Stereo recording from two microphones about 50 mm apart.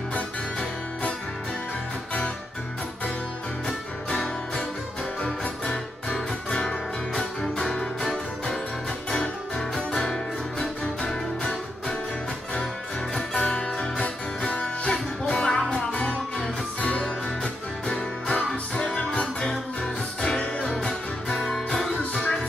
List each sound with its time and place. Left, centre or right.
5.2 s music: centre
9.8 s music: centre
13.3 s music: centre
17.8 s music: centre